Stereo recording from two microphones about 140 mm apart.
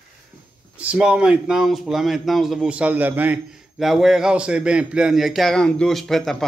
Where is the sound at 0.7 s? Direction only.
10° right (ahead or behind).